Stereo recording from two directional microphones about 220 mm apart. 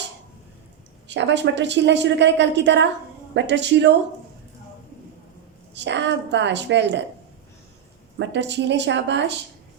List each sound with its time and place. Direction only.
1.0 s a woman's voice: 55° right (ahead or behind)
5.7 s a woman's voice: 55° right (ahead or behind)
8.2 s a woman's voice: 55° right (ahead or behind)